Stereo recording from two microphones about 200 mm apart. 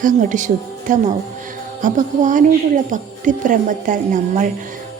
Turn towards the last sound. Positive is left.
turn(degrees=-40)  # may be behind; listen again after turning